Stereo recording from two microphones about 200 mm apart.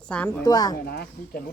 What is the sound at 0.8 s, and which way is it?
Speech, 50° left (ahead or behind).